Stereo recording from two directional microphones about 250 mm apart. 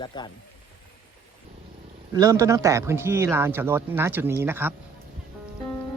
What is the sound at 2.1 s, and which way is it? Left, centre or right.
Speech, centre.